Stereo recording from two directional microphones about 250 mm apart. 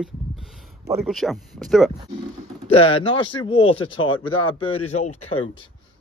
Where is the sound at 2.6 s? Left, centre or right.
Left.